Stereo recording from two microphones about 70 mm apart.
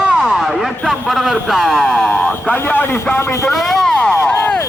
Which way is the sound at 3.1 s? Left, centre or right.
Left.